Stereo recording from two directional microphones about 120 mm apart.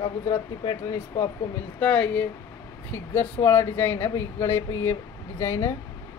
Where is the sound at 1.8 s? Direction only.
10° left (ahead or behind).